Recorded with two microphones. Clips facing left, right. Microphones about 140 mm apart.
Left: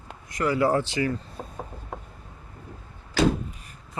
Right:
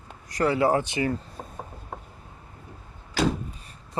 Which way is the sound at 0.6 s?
15° right (ahead or behind).